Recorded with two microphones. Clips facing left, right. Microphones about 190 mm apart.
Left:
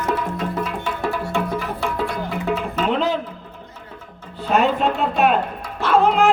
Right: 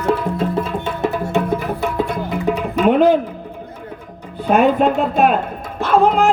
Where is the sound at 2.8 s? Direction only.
55° right (ahead or behind).